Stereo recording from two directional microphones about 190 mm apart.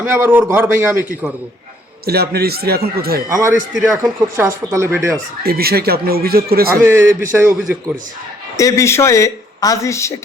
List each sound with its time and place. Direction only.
0.0 s a man's voice: 10° right (ahead or behind)
2.0 s speech: 55° right (ahead or behind)
3.2 s a man's voice: 20° right (ahead or behind)
3.8 s a man's voice: 5° right (ahead or behind)
5.4 s speech: 55° right (ahead or behind)
6.8 s a man's voice: 10° right (ahead or behind)
8.5 s speech: 15° left (ahead or behind)